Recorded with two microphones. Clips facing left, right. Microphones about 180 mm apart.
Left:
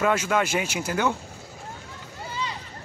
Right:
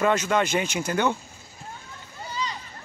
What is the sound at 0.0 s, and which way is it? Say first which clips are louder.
Speech: right 1 dB; 5° left (ahead or behind).